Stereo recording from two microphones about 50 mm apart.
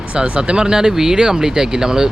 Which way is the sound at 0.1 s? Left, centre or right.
Right.